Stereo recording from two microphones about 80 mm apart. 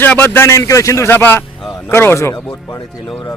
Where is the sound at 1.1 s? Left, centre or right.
Left.